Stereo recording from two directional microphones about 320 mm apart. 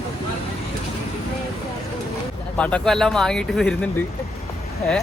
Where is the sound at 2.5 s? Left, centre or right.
Centre.